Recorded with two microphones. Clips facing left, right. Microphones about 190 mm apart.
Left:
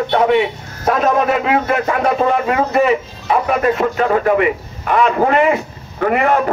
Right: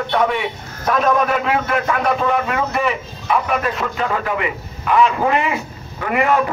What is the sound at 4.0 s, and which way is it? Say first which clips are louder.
A man's voice: left 7 dB; 50° left (ahead or behind).